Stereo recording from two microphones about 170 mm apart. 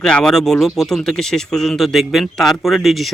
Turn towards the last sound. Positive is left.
turn(degrees=0)  # may be behind; listen again after turning